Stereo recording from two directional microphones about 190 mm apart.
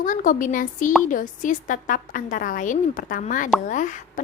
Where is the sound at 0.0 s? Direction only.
45° left (ahead or behind).